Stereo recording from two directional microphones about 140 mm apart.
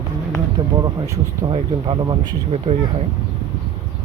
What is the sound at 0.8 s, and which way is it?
Speech, 25° right (ahead or behind).